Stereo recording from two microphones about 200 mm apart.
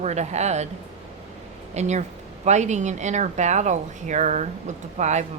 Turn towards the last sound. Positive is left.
turn(degrees=-35)  # may be behind; listen again after turning